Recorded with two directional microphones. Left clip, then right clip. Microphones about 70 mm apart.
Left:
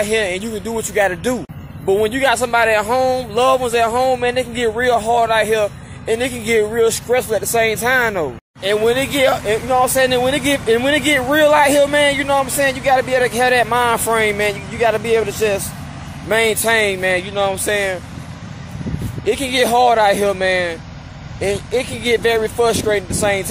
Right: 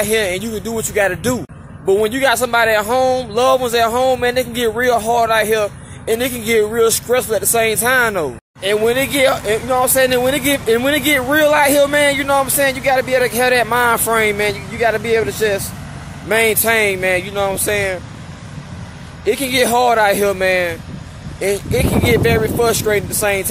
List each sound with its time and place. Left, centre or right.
0.0 s speech: right
14.7 s speech: right
16.3 s speech: right
19.2 s speech: right